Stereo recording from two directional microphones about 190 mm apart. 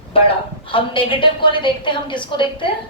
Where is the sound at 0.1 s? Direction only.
30° left (ahead or behind).